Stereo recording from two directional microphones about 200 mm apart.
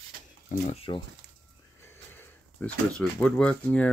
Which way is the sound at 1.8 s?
10° left (ahead or behind).